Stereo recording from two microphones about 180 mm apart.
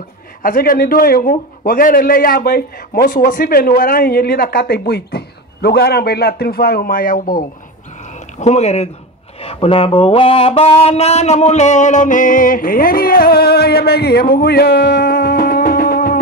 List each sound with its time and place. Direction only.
0.4 s a man's voice: 50° left (ahead or behind)
8.4 s speech: 35° left (ahead or behind); by 16.2 s 55° left (ahead or behind)